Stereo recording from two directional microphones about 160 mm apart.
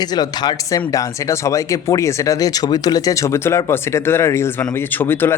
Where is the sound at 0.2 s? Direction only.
25° left (ahead or behind).